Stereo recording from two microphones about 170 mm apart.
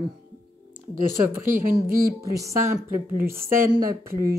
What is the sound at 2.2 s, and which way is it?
A woman's voice, 20° right (ahead or behind).